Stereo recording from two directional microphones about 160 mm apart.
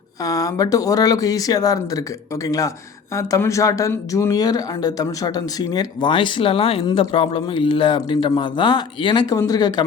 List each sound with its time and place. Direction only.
0.3 s speech: 20° left (ahead or behind)
3.2 s speech: 20° left (ahead or behind)